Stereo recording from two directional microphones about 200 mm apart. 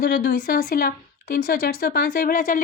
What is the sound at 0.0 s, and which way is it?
A woman's voice, 50° left (ahead or behind).